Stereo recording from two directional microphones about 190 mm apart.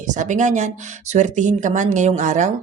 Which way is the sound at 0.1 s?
40° right (ahead or behind).